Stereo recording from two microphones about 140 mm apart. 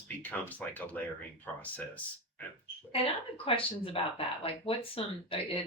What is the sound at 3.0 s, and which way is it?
Speech, 40° left (ahead or behind).